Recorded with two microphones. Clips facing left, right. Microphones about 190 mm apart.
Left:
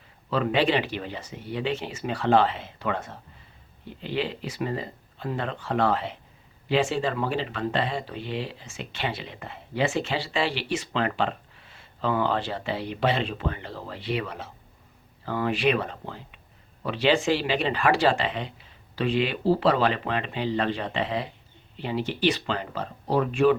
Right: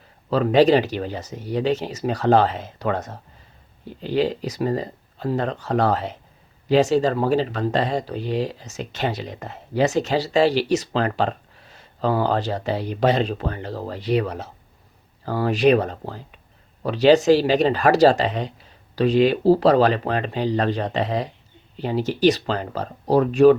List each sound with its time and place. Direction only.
0.3 s speech: 40° right (ahead or behind)